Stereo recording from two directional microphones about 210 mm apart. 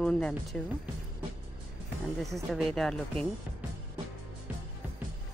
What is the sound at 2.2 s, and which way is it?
A woman's voice, centre (ahead or behind).